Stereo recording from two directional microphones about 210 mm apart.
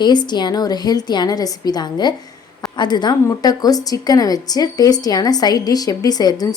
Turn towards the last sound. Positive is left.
turn(degrees=20)  # may be behind; listen again after turning